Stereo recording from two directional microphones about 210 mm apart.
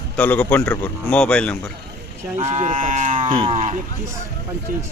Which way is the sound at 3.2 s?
25° right (ahead or behind).